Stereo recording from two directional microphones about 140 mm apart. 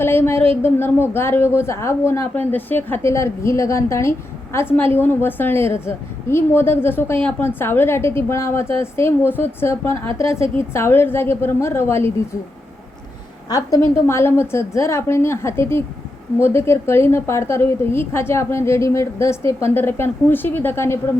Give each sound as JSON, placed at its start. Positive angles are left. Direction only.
{"t": 0.0, "sound": "a woman's voice", "side_deg": 15}
{"t": 13.5, "sound": "a woman's voice", "side_deg": 25}